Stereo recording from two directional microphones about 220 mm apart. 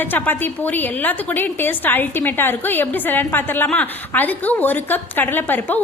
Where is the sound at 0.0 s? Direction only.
10° left (ahead or behind).